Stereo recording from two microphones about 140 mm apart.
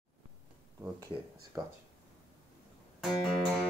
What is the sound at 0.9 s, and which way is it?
Speech, 20° right (ahead or behind).